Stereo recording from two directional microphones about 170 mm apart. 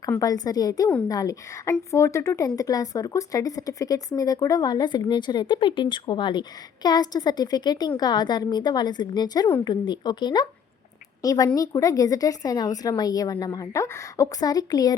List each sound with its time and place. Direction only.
0.2 s speech: 20° left (ahead or behind)